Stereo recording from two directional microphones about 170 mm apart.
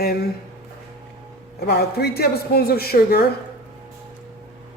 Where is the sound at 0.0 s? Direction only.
70° left (ahead or behind).